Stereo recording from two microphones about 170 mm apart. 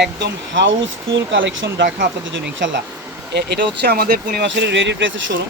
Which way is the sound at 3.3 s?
75° right (ahead or behind).